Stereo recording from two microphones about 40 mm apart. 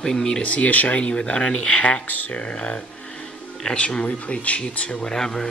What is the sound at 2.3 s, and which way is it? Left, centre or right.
Speech, left.